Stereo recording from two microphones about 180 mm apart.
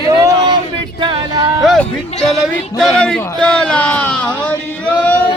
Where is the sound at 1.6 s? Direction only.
Centre (ahead or behind).